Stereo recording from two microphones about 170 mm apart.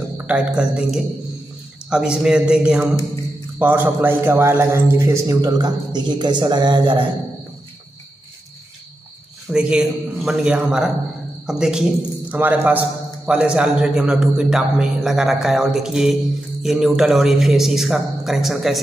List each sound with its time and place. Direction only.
0.3 s a man's voice: 5° right (ahead or behind); by 7.1 s 30° right (ahead or behind)
9.5 s a man's voice: 5° right (ahead or behind)